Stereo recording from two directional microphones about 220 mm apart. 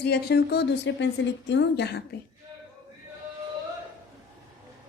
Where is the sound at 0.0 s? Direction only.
50° left (ahead or behind).